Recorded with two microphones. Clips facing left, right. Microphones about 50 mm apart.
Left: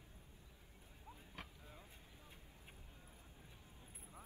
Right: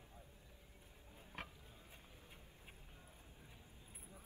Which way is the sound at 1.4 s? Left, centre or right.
Right.